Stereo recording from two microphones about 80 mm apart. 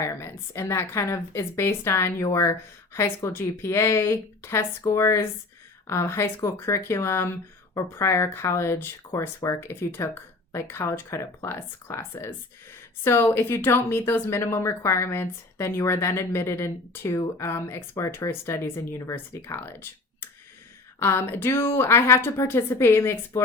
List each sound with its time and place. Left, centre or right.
0.0 s a woman's voice: left
21.0 s a woman's voice: left